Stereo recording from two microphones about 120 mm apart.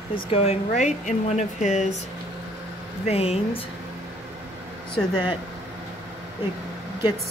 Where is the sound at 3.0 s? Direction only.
60° left (ahead or behind).